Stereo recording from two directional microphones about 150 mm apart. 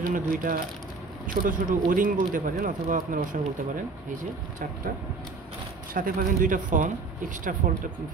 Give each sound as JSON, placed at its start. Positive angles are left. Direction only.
{"t": 0.0, "sound": "speech", "side_deg": -65}
{"t": 5.9, "sound": "speech", "side_deg": -70}